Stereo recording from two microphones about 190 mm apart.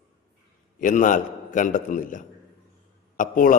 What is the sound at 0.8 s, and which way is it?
A man's voice, 45° left (ahead or behind).